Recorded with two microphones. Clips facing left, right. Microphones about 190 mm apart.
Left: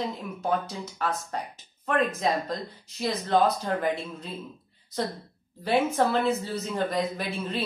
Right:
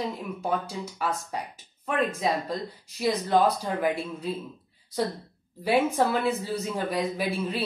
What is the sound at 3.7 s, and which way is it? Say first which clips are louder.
Speech: left 1 dB; 10° right (ahead or behind).